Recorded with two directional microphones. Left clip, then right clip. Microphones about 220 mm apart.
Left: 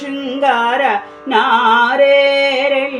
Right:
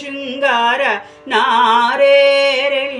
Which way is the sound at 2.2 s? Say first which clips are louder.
Right 1 dB; 30° right (ahead or behind).